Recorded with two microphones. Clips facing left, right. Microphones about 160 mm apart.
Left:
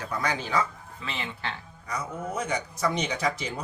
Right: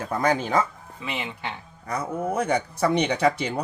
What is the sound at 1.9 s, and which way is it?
Speech, 55° right (ahead or behind).